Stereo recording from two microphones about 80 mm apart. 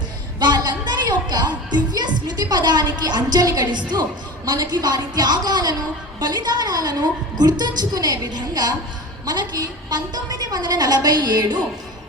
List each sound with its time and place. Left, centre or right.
0.3 s music: right
3.7 s a woman's voice: right
4.4 s a woman's voice: right